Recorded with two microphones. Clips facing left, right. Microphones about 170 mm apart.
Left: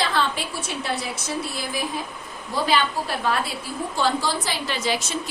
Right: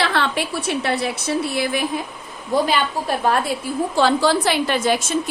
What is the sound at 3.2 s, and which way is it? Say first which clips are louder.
Speech: right 5 dB; 45° right (ahead or behind).